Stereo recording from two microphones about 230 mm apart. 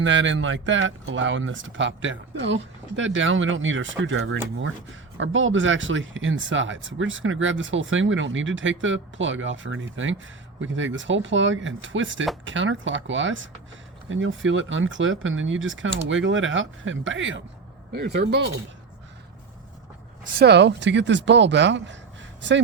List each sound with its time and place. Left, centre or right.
0.0 s speech: right
20.2 s speech: right